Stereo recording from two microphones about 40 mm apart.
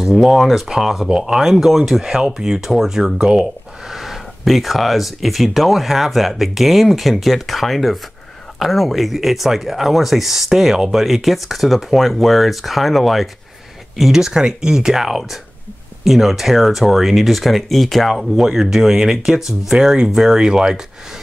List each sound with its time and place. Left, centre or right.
0.0 s speech: centre
1.0 s speech: centre
1.4 s speech: centre
14.1 s speech: centre
18.4 s speech: centre